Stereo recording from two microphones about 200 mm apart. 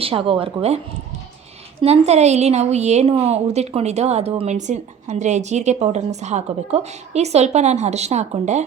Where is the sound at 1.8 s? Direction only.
30° right (ahead or behind).